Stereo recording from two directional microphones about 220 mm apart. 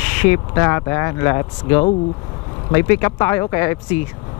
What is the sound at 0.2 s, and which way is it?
Speech, 10° left (ahead or behind).